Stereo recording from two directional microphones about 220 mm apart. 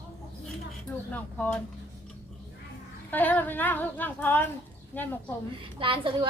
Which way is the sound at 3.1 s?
10° left (ahead or behind).